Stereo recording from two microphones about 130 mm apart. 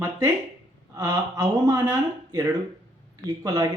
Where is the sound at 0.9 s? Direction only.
25° right (ahead or behind).